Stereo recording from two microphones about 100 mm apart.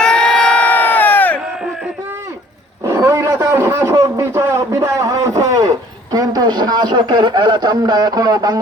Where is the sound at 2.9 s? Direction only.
30° right (ahead or behind).